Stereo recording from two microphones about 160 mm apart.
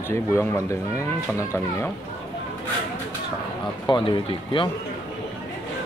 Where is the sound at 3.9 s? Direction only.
30° left (ahead or behind).